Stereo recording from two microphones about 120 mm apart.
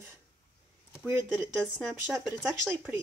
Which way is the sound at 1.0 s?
20° right (ahead or behind).